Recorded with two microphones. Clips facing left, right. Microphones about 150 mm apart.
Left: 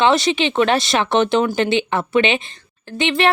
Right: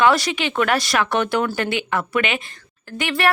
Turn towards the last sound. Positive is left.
turn(degrees=25)  # may be behind; listen again after turning